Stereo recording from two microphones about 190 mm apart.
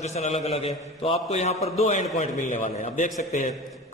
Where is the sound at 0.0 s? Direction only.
35° left (ahead or behind).